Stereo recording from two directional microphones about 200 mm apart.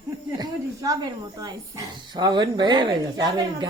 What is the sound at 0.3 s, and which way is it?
Speech, 15° right (ahead or behind).